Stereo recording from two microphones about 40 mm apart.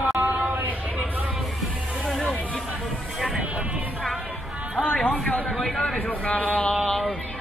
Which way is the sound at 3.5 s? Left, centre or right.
Right.